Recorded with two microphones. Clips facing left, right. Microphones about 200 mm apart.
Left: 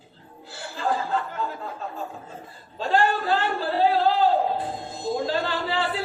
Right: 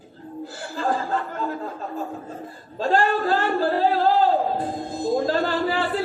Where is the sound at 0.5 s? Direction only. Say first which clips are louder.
Right 1 dB; 45° right (ahead or behind).